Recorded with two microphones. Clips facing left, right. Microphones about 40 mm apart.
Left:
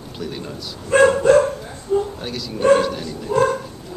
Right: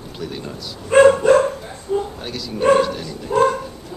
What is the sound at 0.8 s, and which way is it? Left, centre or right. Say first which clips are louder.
Dog: right 2 dB; right.